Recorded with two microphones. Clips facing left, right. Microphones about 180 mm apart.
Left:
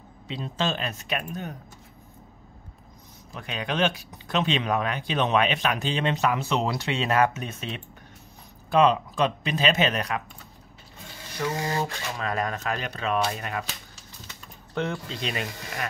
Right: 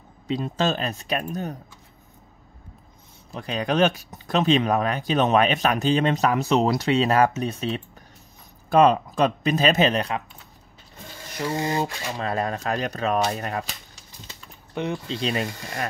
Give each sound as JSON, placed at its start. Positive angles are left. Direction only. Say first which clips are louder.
{"t": 0.3, "sound": "speech", "louder": "right 5 dB", "side_deg": -45}
{"t": 3.3, "sound": "speech", "louder": "right 6 dB", "side_deg": -35}
{"t": 11.4, "sound": "speech", "louder": "right 3 dB", "side_deg": -25}
{"t": 12.2, "sound": "speech", "louder": "right 3 dB", "side_deg": -30}
{"t": 14.7, "sound": "speech", "louder": "right 1 dB", "side_deg": -15}
{"t": 15.0, "sound": "speech", "louder": "right 5 dB", "side_deg": -30}